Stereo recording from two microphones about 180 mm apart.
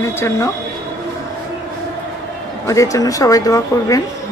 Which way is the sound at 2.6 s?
20° left (ahead or behind).